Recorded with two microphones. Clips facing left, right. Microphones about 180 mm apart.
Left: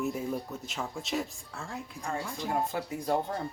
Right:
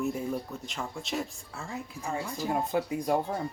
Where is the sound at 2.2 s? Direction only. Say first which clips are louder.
Right 2 dB; 5° right (ahead or behind).